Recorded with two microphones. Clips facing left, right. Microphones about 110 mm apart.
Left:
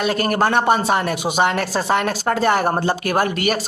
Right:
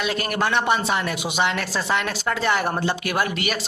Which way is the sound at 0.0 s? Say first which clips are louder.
Left 5 dB; 40° left (ahead or behind).